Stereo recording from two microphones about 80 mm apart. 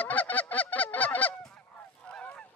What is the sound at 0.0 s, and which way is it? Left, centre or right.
Goose, centre.